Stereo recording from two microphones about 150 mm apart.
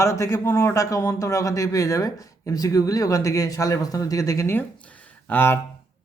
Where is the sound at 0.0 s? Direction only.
20° left (ahead or behind).